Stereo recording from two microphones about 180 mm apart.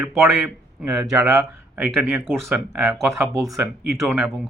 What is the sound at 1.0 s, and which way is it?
Speech, 15° right (ahead or behind).